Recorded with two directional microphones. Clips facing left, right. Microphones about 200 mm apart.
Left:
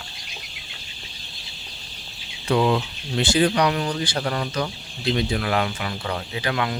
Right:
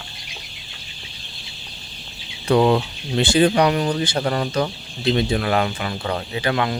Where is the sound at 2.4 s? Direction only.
40° right (ahead or behind).